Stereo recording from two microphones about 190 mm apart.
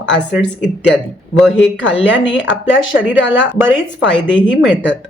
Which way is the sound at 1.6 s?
75° left (ahead or behind).